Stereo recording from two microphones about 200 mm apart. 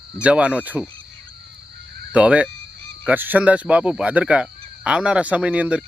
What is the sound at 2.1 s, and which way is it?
Speech, 5° right (ahead or behind).